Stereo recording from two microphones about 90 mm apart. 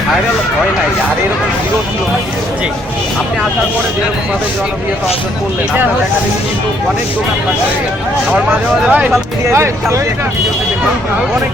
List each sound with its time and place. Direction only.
8.9 s speech: 15° right (ahead or behind)
9.5 s speech: 30° right (ahead or behind)